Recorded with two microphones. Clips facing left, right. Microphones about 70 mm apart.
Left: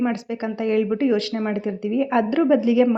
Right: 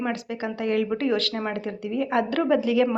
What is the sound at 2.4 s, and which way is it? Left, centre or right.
Speech, left.